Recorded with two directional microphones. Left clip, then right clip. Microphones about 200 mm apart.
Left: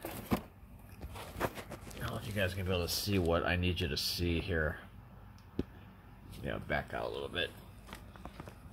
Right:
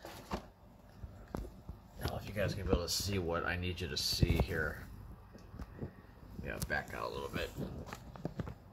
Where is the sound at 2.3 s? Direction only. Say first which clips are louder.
Left 1 dB; 30° left (ahead or behind).